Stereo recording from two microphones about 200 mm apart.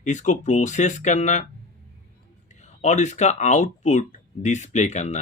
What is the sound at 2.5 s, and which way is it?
Speech, 35° left (ahead or behind).